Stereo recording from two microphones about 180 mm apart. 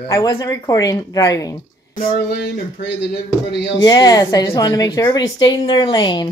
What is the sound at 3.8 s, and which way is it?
A woman's voice, 20° left (ahead or behind).